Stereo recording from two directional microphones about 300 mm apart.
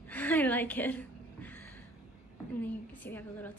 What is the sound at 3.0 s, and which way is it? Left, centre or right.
Speech, centre.